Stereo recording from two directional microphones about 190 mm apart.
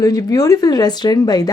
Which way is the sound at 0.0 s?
20° left (ahead or behind).